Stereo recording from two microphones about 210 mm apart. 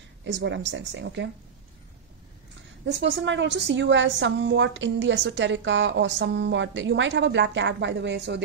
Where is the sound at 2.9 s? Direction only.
55° right (ahead or behind).